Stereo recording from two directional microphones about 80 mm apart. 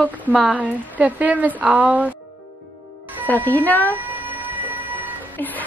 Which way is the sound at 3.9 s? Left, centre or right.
Right.